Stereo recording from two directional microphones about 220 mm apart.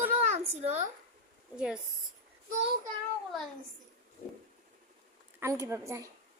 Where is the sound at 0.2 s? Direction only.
30° right (ahead or behind).